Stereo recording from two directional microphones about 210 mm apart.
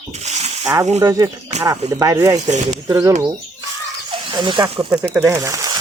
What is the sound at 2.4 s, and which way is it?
Speech, 35° right (ahead or behind).